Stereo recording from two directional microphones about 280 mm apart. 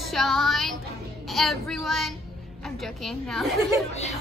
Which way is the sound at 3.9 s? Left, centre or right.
Left.